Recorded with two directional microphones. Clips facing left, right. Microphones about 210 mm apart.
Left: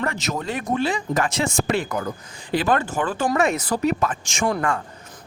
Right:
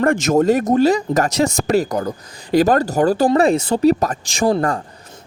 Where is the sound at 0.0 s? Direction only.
50° right (ahead or behind).